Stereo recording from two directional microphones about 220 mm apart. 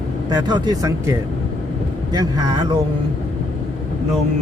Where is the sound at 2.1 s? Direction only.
20° right (ahead or behind).